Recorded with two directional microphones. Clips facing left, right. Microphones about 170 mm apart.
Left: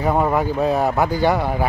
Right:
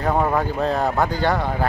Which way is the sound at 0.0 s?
10° left (ahead or behind).